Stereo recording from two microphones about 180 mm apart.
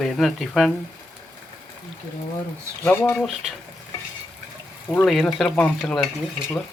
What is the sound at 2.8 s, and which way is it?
Speech, 10° left (ahead or behind).